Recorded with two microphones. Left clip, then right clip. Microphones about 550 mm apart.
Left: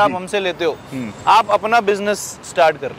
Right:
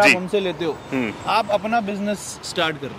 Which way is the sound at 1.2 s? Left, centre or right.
Left.